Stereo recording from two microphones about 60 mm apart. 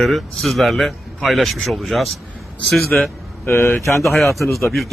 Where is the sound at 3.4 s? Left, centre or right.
Left.